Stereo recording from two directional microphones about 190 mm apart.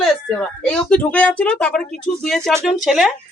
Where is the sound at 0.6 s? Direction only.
5° left (ahead or behind).